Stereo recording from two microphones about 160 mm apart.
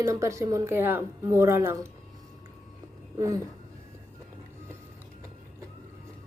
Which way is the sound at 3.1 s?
20° right (ahead or behind).